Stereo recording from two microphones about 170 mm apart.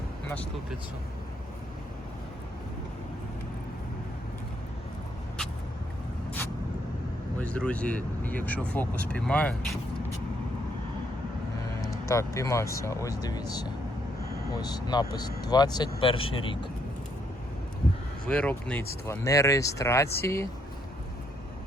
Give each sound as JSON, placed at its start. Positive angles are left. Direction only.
{"t": 7.3, "sound": "speech", "side_deg": 5}
{"t": 12.0, "sound": "speech", "side_deg": 15}
{"t": 18.3, "sound": "speech", "side_deg": 5}